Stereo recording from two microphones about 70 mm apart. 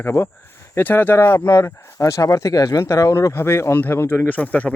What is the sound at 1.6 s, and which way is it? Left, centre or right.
Speech, left.